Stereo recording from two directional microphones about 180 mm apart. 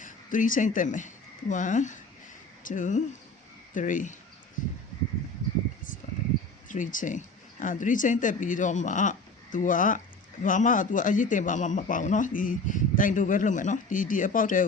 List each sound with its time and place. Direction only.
0.0 s speech: 45° left (ahead or behind)
6.7 s speech: 45° left (ahead or behind)